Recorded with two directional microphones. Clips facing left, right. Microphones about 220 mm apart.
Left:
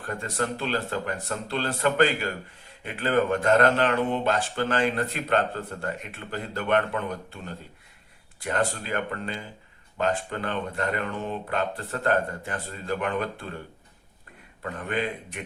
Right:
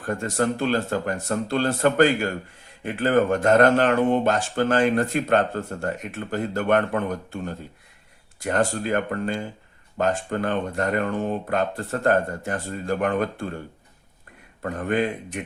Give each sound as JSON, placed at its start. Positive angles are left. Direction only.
{"t": 0.1, "sound": "speech", "side_deg": -45}
{"t": 14.6, "sound": "speech", "side_deg": -45}